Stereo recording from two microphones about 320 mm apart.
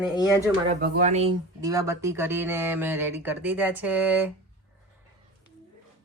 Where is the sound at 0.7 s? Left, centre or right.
Right; by 4.3 s centre.